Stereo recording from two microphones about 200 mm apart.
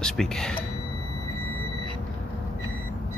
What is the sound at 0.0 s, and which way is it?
Speech, 5° left (ahead or behind).